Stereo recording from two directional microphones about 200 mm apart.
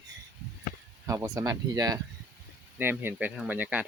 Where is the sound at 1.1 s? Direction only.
15° right (ahead or behind).